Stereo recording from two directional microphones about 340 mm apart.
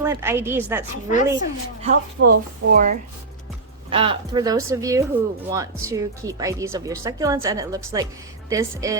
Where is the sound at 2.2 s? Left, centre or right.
Right.